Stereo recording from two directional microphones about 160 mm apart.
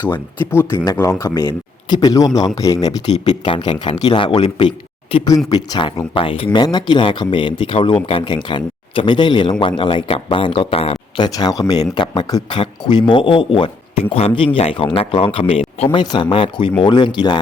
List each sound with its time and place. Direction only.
0.0 s speech: 15° left (ahead or behind)
3.1 s speech: 40° left (ahead or behind)
5.1 s speech: 25° left (ahead or behind)
11.3 s speech: 25° left (ahead or behind)